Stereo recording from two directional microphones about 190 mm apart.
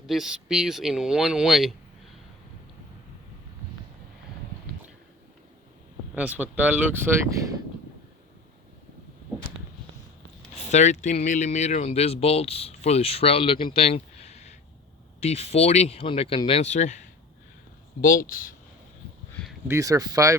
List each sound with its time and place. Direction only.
0.0 s speech: centre (ahead or behind)
6.1 s speech: 10° right (ahead or behind)
9.3 s a sound: 10° right (ahead or behind)
10.5 s speech: 35° left (ahead or behind)
18.0 s speech: 45° left (ahead or behind)
19.6 s speech: 15° right (ahead or behind)